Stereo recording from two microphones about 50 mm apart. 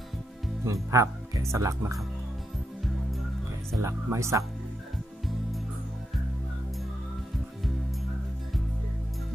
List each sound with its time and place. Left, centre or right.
0.7 s speech: right
3.8 s speech: right